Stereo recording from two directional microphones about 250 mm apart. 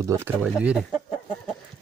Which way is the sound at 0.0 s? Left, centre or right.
Centre.